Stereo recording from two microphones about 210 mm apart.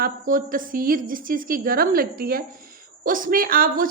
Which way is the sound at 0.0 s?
40° right (ahead or behind).